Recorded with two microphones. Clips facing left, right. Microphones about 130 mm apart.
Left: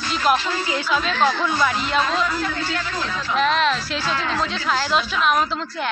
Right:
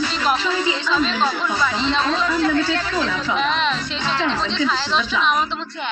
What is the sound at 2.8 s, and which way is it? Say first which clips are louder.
Speech: right 5 dB; 90° right.